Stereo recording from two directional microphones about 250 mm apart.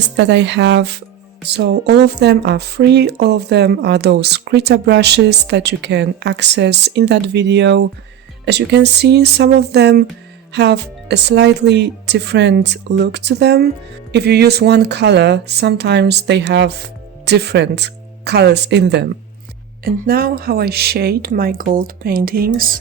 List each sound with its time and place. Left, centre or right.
0.2 s speech: right